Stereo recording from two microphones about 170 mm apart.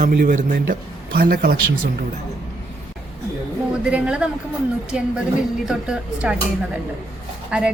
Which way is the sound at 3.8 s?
5° right (ahead or behind).